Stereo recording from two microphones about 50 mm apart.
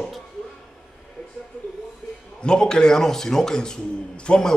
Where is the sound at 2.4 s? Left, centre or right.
Centre.